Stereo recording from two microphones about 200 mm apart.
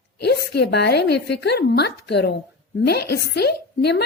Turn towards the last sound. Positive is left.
turn(degrees=55)  # may be behind; listen again after turning